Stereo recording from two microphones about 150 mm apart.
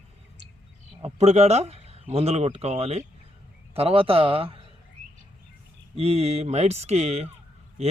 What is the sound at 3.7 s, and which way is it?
Fowl, 40° right (ahead or behind).